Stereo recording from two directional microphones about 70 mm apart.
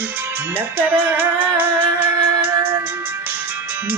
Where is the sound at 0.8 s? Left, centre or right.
Right.